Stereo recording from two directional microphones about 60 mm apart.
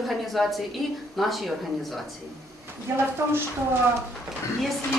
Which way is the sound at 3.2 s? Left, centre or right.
Right.